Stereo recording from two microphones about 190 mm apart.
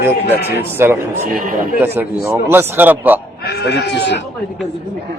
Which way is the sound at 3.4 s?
60° left (ahead or behind).